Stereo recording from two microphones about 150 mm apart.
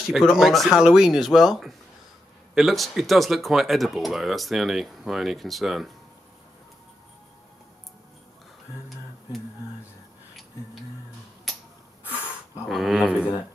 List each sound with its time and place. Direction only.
0.1 s speech: centre (ahead or behind)
12.1 s a sound: 15° left (ahead or behind)
12.6 s speech: centre (ahead or behind)